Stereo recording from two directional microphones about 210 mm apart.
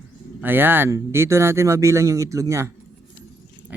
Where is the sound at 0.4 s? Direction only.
10° right (ahead or behind).